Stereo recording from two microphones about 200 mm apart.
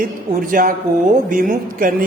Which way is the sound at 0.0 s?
45° right (ahead or behind).